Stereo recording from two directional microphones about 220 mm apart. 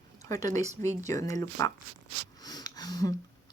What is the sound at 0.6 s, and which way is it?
Speech, 30° right (ahead or behind).